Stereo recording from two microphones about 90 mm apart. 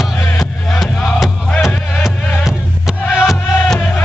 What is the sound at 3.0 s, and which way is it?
Music, 25° left (ahead or behind).